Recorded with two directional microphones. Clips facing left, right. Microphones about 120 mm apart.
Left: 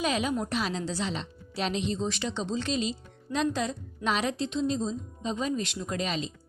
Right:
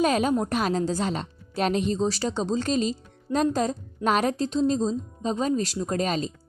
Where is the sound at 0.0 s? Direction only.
45° right (ahead or behind).